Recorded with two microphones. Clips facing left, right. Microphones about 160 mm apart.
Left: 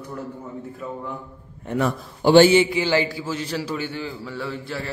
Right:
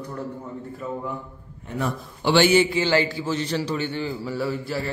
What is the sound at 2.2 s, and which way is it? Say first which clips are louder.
Speech: left 6 dB; 45° left (ahead or behind).